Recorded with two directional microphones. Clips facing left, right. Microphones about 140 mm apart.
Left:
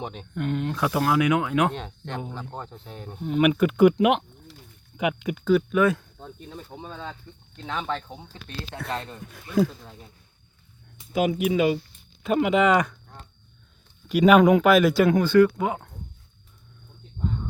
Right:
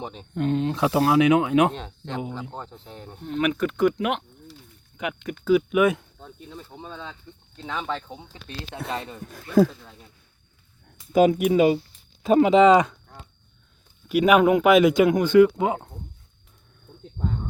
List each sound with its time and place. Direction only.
0.1 s speech: 30° right (ahead or behind)
2.5 s speech: centre (ahead or behind)
3.9 s speech: 20° left (ahead or behind)
5.5 s speech: 10° right (ahead or behind)
6.1 s speech: 10° left (ahead or behind); by 9.2 s 5° right (ahead or behind)
11.3 s speech: 45° right (ahead or behind)
12.2 s speech: 30° right (ahead or behind)
14.1 s speech: 10° right (ahead or behind)
14.7 s speech: 20° right (ahead or behind)